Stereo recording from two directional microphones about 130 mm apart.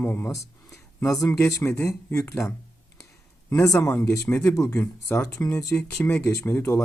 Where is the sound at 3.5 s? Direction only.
25° left (ahead or behind).